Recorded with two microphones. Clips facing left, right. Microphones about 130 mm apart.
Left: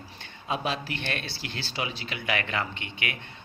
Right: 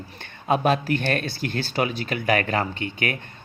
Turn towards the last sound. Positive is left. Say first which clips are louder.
# right 8 dB
turn(degrees=-45)  # may be behind; listen again after turning